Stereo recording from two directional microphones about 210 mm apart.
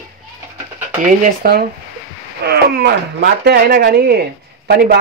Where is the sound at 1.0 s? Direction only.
40° right (ahead or behind).